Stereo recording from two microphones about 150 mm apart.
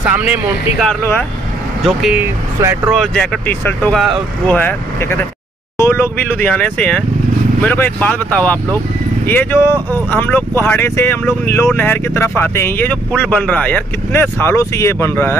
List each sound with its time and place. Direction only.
0.1 s speech: 10° right (ahead or behind)
1.9 s speech: centre (ahead or behind)
2.6 s speech: 15° right (ahead or behind)
2.9 s speech: centre (ahead or behind)